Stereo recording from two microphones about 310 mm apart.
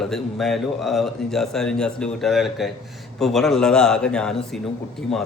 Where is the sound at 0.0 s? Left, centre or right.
Centre.